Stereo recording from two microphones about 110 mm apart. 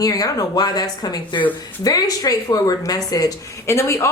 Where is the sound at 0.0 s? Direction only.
35° left (ahead or behind).